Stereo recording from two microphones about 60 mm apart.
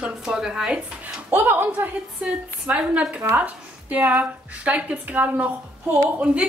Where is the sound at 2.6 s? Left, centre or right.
Right.